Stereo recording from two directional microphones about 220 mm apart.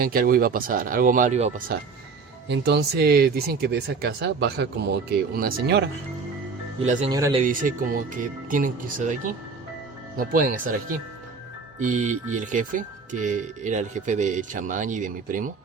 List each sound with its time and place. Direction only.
0.0 s speech: 40° right (ahead or behind)
2.5 s speech: 50° right (ahead or behind)
6.8 s speech: 35° right (ahead or behind)
7.1 s speech: 15° right (ahead or behind)
7.4 s speech: 35° right (ahead or behind)